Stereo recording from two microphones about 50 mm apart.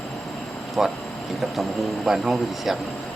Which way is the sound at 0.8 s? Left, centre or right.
Centre.